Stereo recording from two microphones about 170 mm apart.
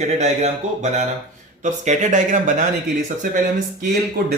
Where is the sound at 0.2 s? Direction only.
40° right (ahead or behind).